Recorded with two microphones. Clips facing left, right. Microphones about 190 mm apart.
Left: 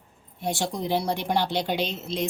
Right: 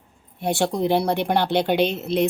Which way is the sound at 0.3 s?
65° right (ahead or behind).